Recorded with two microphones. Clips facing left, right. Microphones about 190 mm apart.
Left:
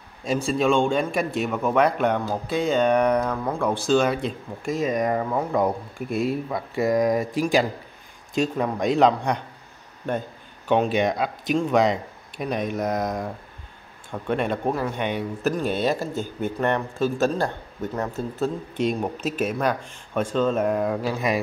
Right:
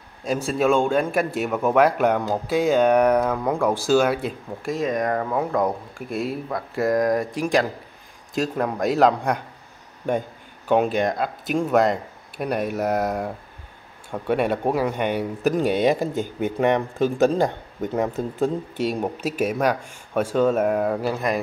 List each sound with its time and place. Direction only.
0.2 s a man's voice: centre (ahead or behind)
10.7 s a man's voice: 5° right (ahead or behind)